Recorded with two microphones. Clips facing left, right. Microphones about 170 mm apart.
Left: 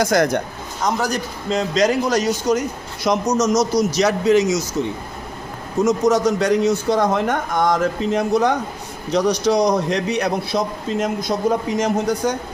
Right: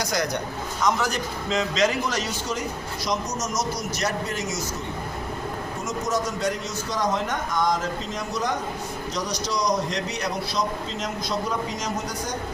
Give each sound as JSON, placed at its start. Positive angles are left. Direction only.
{"t": 0.0, "sound": "a man's voice", "side_deg": 50}
{"t": 0.8, "sound": "a man's voice", "side_deg": 35}
{"t": 3.1, "sound": "a man's voice", "side_deg": 75}
{"t": 5.8, "sound": "a man's voice", "side_deg": 75}